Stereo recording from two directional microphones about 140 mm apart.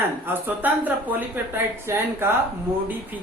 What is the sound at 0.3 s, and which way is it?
Speech, 15° right (ahead or behind).